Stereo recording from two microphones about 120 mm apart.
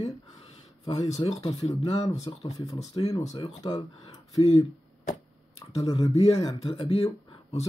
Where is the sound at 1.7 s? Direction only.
65° left (ahead or behind).